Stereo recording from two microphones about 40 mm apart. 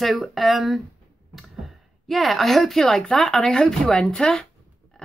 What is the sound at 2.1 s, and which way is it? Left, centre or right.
Speech, centre.